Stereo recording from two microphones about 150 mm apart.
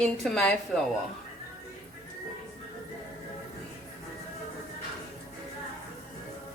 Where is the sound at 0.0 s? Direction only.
5° left (ahead or behind).